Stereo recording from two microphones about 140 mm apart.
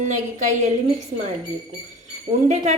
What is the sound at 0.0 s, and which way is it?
Speech, 60° right (ahead or behind).